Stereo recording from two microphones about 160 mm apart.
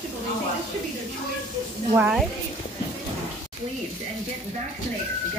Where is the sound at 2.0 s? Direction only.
5° right (ahead or behind).